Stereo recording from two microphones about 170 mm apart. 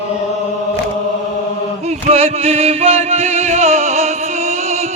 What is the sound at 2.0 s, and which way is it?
Music, 35° right (ahead or behind).